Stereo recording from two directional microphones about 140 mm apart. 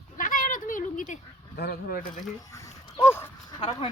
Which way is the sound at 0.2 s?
75° left (ahead or behind).